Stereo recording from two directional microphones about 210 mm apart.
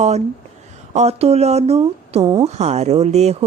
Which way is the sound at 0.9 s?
30° right (ahead or behind).